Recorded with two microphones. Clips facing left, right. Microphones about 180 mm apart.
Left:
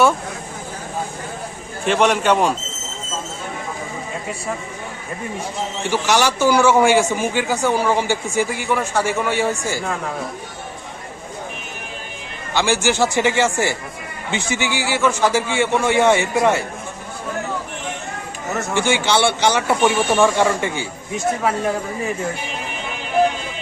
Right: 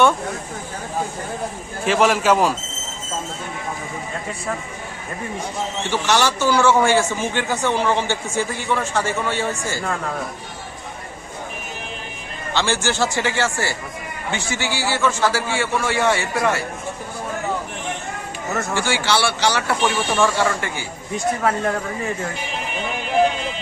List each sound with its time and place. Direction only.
1.8 s a man's voice: centre (ahead or behind)
5.9 s a man's voice: 10° left (ahead or behind)
12.5 s a man's voice: 15° left (ahead or behind)
18.7 s a man's voice: 20° left (ahead or behind)
21.4 s a man's voice: 5° left (ahead or behind)